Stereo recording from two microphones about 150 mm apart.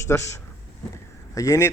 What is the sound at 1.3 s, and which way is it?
Speech, 20° left (ahead or behind).